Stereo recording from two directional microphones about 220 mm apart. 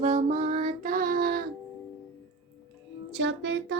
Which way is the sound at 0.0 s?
35° right (ahead or behind).